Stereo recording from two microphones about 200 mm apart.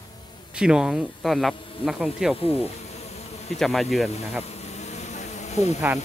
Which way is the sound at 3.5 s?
Centre (ahead or behind).